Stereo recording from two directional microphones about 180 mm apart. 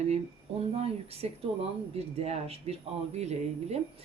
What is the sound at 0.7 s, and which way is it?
Speech, 35° right (ahead or behind).